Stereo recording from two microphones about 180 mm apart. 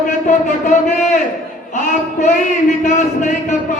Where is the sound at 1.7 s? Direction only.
40° left (ahead or behind).